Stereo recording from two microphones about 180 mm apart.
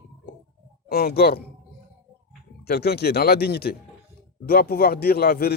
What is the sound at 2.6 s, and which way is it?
Speech, 60° left (ahead or behind).